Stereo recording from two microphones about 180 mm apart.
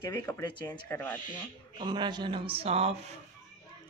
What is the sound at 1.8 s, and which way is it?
Speech, 25° right (ahead or behind).